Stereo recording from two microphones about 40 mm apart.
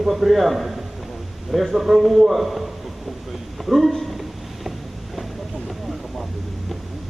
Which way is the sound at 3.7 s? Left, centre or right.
Centre.